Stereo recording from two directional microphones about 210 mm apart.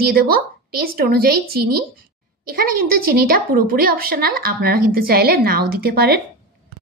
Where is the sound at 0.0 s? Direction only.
45° right (ahead or behind).